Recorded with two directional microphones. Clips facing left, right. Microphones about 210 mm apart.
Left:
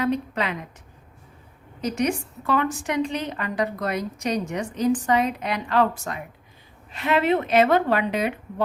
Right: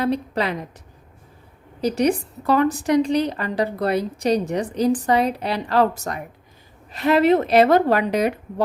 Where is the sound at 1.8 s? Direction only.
35° right (ahead or behind).